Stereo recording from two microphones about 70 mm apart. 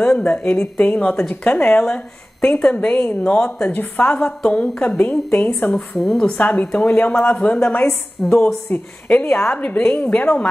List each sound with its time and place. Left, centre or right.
0.2 s a woman's voice: centre
5.9 s a woman's voice: centre
8.2 s a woman's voice: centre
9.2 s a woman's voice: left
9.5 s a woman's voice: centre